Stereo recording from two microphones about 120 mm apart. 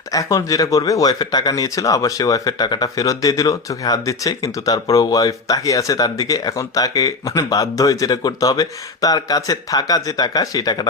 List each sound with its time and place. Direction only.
0.1 s speech: 25° left (ahead or behind)